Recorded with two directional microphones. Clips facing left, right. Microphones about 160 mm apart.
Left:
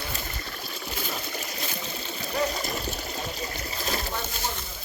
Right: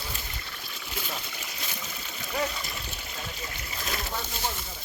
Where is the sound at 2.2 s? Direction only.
40° left (ahead or behind).